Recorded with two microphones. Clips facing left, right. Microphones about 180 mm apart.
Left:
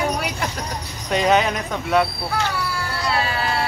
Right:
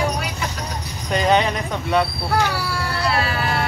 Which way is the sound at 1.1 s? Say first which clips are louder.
Even; centre (ahead or behind).